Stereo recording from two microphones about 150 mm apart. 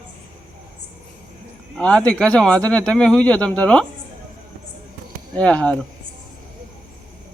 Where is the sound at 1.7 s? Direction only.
5° left (ahead or behind).